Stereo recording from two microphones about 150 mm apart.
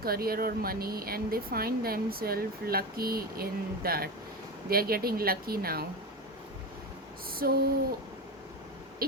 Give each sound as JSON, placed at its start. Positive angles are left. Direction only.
{"t": 0.0, "sound": "speech", "side_deg": -85}
{"t": 7.3, "sound": "a sound", "side_deg": -85}
{"t": 9.0, "sound": "owl", "side_deg": -85}